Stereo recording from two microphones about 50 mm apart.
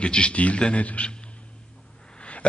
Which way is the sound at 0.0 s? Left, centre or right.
Left.